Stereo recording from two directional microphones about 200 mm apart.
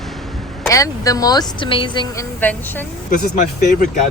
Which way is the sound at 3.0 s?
40° left (ahead or behind).